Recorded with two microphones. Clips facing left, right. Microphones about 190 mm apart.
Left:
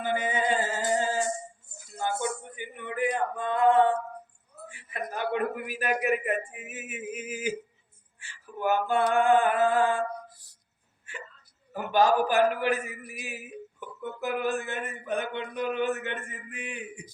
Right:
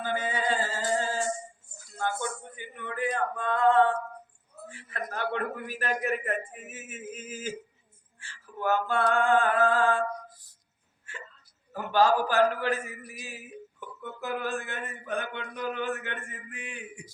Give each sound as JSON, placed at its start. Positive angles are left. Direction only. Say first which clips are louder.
{"t": 0.0, "sound": "a sound", "louder": "left 2 dB", "side_deg": 20}
{"t": 4.7, "sound": "a man's voice", "louder": "left 1 dB", "side_deg": 15}
{"t": 11.1, "sound": "hiccup", "louder": "left 3 dB", "side_deg": 15}
{"t": 11.7, "sound": "a man's voice", "louder": "left 1 dB", "side_deg": 15}
{"t": 13.1, "sound": "music", "louder": "left 3 dB", "side_deg": 15}